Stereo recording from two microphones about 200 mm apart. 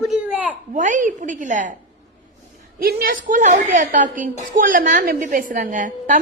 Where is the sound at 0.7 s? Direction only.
40° right (ahead or behind).